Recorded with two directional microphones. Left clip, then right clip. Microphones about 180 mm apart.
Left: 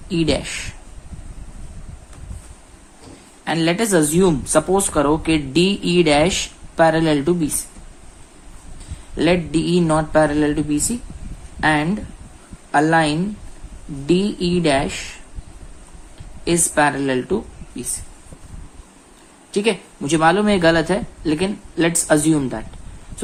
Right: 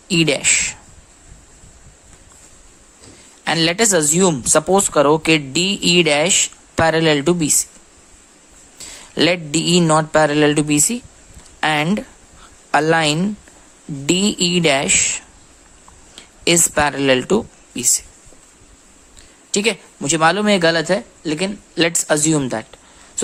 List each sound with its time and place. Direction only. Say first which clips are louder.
0.1 s speech: right 4 dB; 35° right (ahead or behind)
3.4 s a woman's voice: right 3 dB; 35° right (ahead or behind)
9.1 s speech: right 1 dB; 40° right (ahead or behind)
16.4 s speech: right 1 dB; 40° right (ahead or behind)
19.5 s speech: right 1 dB; 35° right (ahead or behind)
21.8 s speech: even; 35° right (ahead or behind)